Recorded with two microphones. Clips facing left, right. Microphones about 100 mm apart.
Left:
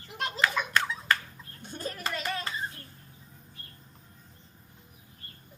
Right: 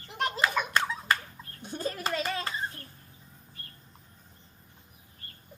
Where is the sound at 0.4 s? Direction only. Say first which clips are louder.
Left 1 dB; 15° right (ahead or behind).